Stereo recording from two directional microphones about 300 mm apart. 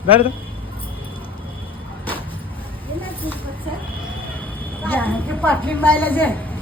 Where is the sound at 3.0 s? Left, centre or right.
Centre.